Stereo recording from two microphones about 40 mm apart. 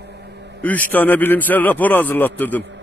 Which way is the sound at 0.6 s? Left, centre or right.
Left.